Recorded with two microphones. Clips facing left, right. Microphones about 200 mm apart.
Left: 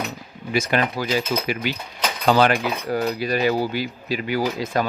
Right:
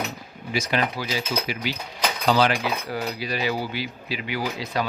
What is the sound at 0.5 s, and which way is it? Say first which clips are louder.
Cutlery: left 3 dB; 55° left (ahead or behind).